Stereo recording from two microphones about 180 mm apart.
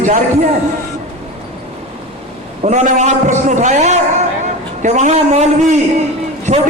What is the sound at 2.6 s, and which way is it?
A man's voice, 40° right (ahead or behind).